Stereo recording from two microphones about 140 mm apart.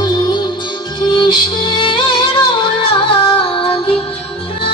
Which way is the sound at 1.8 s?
35° left (ahead or behind).